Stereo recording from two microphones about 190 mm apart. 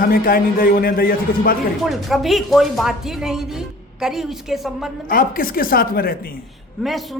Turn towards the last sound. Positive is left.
turn(degrees=0)  # may be behind; listen again after turning